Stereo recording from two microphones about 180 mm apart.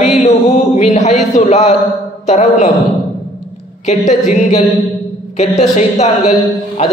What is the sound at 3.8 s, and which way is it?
Speech, 40° left (ahead or behind).